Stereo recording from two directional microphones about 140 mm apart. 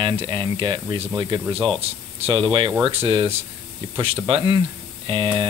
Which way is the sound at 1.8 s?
45° right (ahead or behind).